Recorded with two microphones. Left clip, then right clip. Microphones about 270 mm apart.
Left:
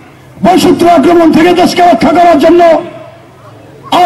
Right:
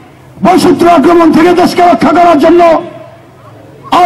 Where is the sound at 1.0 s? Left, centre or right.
Right.